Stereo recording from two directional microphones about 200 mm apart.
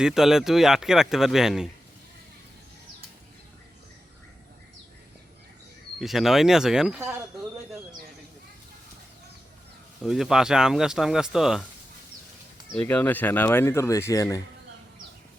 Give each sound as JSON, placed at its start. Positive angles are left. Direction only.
{"t": 0.0, "sound": "speech", "side_deg": 0}
{"t": 6.0, "sound": "speech", "side_deg": 0}
{"t": 10.0, "sound": "speech", "side_deg": 0}
{"t": 12.7, "sound": "speech", "side_deg": 10}